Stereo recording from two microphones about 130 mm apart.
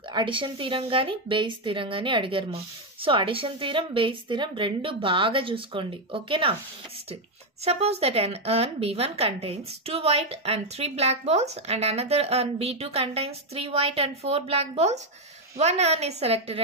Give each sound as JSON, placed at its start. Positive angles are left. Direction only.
{"t": 0.1, "sound": "a woman's voice", "side_deg": -40}
{"t": 7.6, "sound": "a woman's voice", "side_deg": -50}